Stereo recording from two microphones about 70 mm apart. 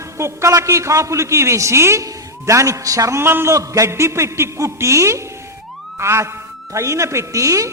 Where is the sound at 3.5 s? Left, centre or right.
Right.